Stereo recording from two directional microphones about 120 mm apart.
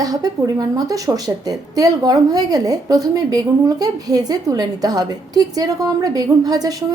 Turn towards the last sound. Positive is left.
turn(degrees=-35)  # may be behind; listen again after turning